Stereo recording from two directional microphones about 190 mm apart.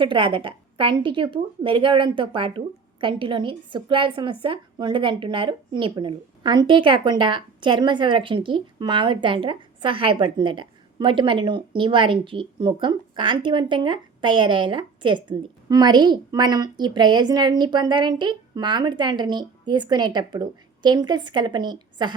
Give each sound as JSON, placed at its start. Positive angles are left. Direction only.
{"t": 0.0, "sound": "a woman's voice", "side_deg": -25}